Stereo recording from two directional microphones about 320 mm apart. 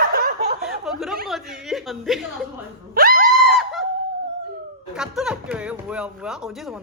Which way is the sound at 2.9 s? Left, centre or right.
Right.